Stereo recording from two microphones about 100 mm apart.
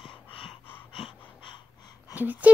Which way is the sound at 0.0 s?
60° left (ahead or behind).